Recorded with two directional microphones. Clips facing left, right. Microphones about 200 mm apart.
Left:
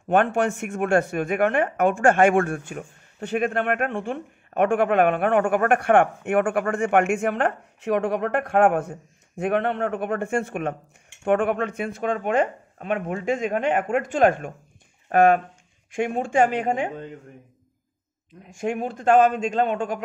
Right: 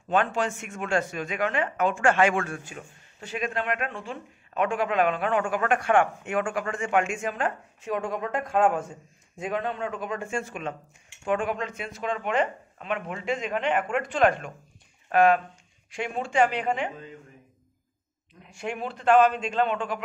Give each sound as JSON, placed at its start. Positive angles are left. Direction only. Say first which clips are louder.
{"t": 0.1, "sound": "speech", "louder": "left 5 dB", "side_deg": 60}
{"t": 18.5, "sound": "speech", "louder": "left 6 dB", "side_deg": 45}